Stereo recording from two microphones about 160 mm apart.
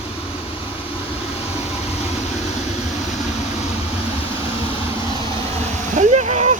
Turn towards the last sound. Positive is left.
turn(degrees=-50)  # may be behind; listen again after turning